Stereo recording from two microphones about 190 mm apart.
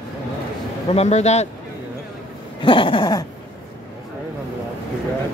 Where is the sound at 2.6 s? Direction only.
25° left (ahead or behind).